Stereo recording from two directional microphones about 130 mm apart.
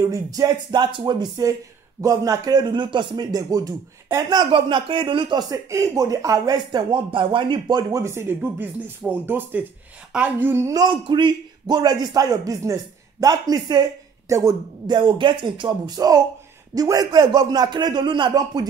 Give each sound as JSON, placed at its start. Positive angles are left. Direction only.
{"t": 0.0, "sound": "a man's voice", "side_deg": -25}
{"t": 5.5, "sound": "speech", "side_deg": -25}
{"t": 10.9, "sound": "a man's voice", "side_deg": -40}